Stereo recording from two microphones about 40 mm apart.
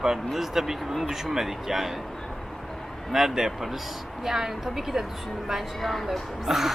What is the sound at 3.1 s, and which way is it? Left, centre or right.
Speech, centre.